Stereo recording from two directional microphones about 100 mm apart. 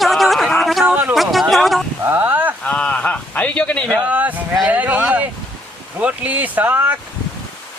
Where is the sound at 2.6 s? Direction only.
10° left (ahead or behind).